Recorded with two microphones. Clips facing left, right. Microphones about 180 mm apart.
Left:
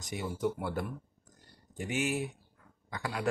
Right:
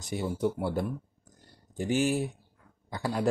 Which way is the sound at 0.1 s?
30° right (ahead or behind).